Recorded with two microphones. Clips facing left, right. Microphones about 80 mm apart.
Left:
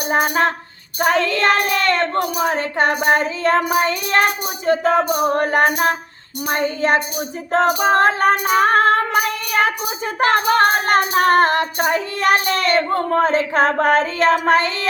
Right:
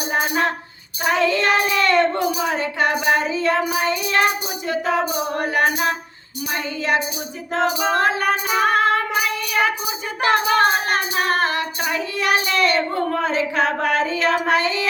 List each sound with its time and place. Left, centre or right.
0.2 s female singing: left
6.5 s child singing: left
7.5 s female singing: left